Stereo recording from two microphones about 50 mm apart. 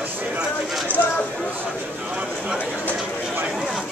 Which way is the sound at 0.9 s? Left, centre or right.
Right.